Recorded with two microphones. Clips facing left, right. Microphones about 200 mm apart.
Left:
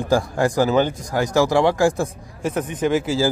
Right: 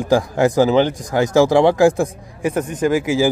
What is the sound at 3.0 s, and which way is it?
Speech, 15° right (ahead or behind).